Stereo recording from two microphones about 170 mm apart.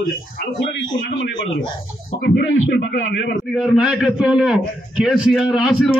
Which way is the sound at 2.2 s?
85° left.